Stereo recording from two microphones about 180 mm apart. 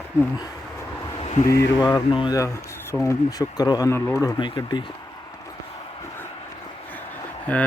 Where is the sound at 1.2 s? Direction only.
40° left (ahead or behind).